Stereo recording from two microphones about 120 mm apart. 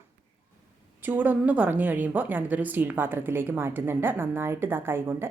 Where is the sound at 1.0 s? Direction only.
15° right (ahead or behind).